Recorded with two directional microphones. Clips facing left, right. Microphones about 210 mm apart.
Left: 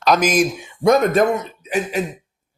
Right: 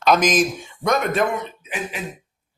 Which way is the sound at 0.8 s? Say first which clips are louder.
Left 6 dB; 35° left (ahead or behind).